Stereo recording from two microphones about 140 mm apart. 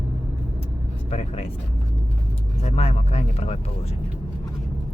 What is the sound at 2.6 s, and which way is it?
Speech, 50° left (ahead or behind).